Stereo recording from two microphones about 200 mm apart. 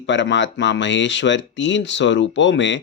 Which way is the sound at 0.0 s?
65° left (ahead or behind).